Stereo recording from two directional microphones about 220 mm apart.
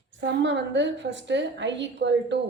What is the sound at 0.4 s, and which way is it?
Speech, 55° right (ahead or behind).